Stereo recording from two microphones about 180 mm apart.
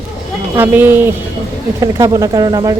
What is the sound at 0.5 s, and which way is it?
A woman's voice, 10° right (ahead or behind).